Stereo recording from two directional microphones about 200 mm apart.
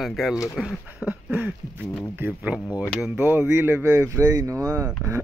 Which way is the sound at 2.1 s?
10° right (ahead or behind).